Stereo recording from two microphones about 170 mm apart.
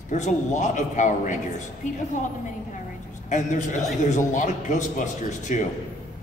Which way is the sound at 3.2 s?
45° left (ahead or behind).